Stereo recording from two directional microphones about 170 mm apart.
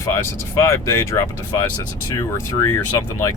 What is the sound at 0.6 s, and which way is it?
Speech, 15° left (ahead or behind).